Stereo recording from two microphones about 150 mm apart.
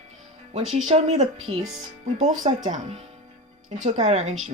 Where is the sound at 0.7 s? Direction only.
45° right (ahead or behind).